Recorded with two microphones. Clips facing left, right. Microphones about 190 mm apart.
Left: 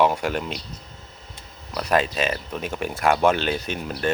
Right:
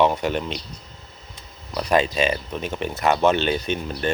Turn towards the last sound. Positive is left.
turn(degrees=5)  # may be behind; listen again after turning